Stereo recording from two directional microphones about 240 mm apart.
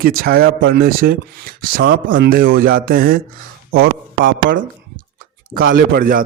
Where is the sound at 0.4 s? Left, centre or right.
Right.